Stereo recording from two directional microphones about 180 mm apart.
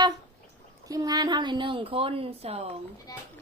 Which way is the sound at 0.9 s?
20° right (ahead or behind).